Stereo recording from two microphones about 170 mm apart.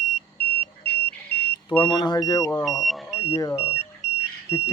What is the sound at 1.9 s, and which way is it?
Speech, 25° left (ahead or behind).